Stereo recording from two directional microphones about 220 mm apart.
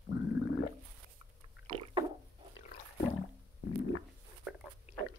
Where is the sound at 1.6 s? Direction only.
20° right (ahead or behind).